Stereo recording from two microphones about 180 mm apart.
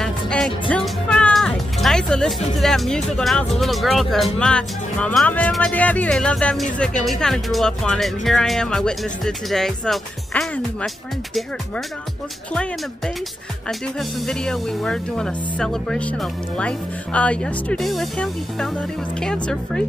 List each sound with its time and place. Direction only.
0.0 s speech: 5° left (ahead or behind)
13.7 s speech: centre (ahead or behind)